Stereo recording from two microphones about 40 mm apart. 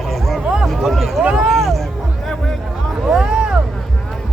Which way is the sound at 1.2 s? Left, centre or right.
Right.